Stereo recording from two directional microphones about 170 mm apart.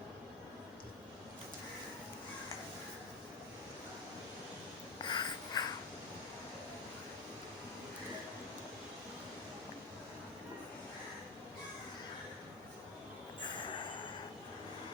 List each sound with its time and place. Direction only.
4.9 s writing: 25° left (ahead or behind)
13.4 s train: 25° left (ahead or behind)